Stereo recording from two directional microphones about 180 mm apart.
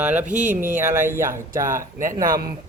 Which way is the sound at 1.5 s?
50° right (ahead or behind).